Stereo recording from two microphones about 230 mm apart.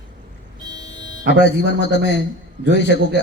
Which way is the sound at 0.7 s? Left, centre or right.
Centre.